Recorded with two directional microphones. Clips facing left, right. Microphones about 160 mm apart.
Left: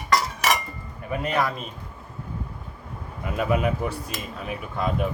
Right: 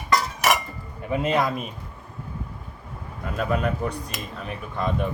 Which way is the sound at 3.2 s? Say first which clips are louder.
Left 1 dB; 5° left (ahead or behind).